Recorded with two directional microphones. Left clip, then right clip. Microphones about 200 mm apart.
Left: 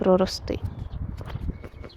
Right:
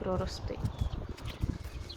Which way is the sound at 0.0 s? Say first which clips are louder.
Left 14 dB; 45° left (ahead or behind).